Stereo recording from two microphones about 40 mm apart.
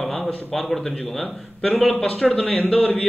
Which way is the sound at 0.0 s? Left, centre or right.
Centre.